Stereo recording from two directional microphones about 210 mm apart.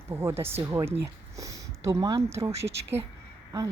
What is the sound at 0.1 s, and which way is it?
Speech, 10° right (ahead or behind).